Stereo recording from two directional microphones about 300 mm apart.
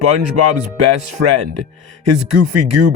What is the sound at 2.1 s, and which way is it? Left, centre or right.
Speech, right.